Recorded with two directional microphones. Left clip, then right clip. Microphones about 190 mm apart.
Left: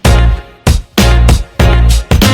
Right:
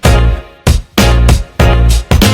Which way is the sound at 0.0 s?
Centre (ahead or behind).